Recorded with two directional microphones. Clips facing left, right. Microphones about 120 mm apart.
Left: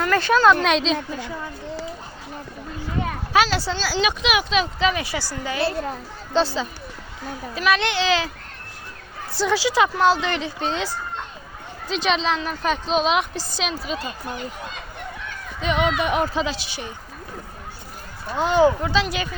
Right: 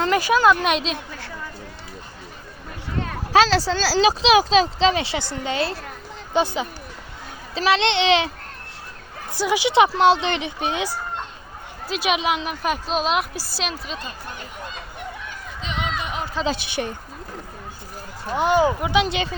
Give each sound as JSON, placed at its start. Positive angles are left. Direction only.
{"t": 0.2, "sound": "a woman's voice", "side_deg": -10}
{"t": 3.3, "sound": "speech", "side_deg": -35}
{"t": 5.6, "sound": "a child's voice", "side_deg": 25}
{"t": 6.3, "sound": "a woman's voice", "side_deg": -15}
{"t": 9.3, "sound": "a woman's voice", "side_deg": -15}
{"t": 15.6, "sound": "speech", "side_deg": 60}
{"t": 16.5, "sound": "a woman's voice", "side_deg": -60}
{"t": 18.3, "sound": "a woman's voice", "side_deg": -10}
{"t": 19.0, "sound": "speech", "side_deg": -25}